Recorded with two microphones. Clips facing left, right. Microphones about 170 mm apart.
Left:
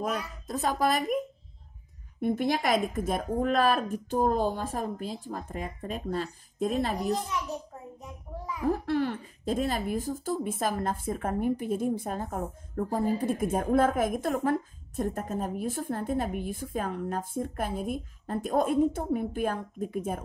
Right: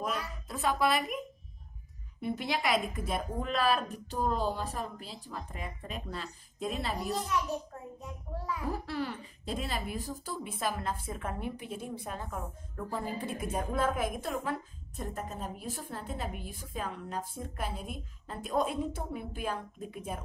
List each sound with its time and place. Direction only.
0.0 s speech: 40° left (ahead or behind)
8.6 s speech: 50° left (ahead or behind)